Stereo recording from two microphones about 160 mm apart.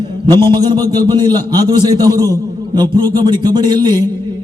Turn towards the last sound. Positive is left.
turn(degrees=-25)  # may be behind; listen again after turning